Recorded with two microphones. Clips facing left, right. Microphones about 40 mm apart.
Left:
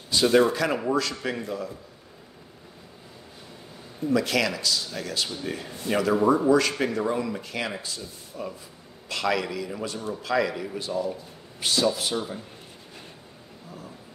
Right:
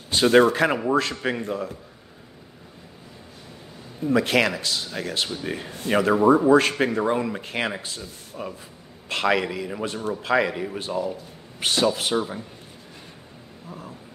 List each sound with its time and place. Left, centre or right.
0.1 s a man's voice: right
4.0 s a man's voice: right
12.2 s a man's voice: centre
13.7 s a sound: right